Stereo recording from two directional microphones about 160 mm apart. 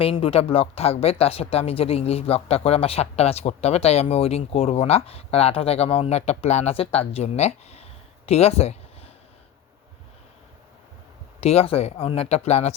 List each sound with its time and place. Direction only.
0.0 s speech: 35° left (ahead or behind)
11.3 s speech: 40° left (ahead or behind)